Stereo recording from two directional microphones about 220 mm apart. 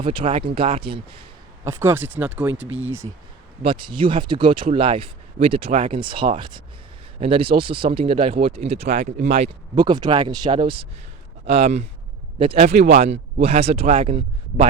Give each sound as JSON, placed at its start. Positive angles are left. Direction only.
{"t": 0.0, "sound": "speech", "side_deg": -25}
{"t": 1.6, "sound": "speech", "side_deg": -10}
{"t": 3.6, "sound": "speech", "side_deg": -25}